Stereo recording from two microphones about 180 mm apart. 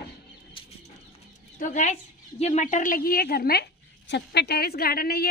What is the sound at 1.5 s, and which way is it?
A woman's voice, 45° left (ahead or behind).